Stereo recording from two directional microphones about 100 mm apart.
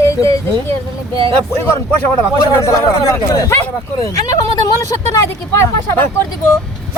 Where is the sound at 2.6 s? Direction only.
30° left (ahead or behind).